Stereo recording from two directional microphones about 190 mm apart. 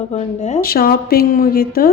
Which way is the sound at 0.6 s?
50° left (ahead or behind).